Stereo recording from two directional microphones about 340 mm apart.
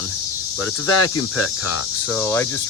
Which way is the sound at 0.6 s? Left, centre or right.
Left.